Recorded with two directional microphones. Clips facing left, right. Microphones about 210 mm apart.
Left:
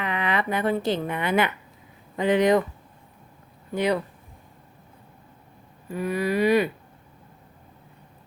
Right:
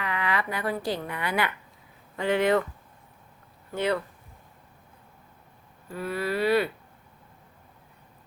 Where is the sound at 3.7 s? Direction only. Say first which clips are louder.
Left 3 dB; 15° left (ahead or behind).